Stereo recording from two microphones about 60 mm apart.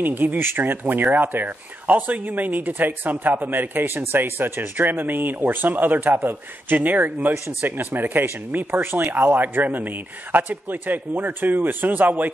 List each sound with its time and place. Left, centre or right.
0.0 s speech: right